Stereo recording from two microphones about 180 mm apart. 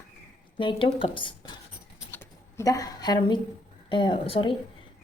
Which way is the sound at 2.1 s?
15° left (ahead or behind).